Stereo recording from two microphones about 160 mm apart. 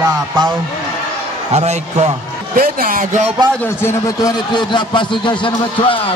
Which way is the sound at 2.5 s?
60° right (ahead or behind).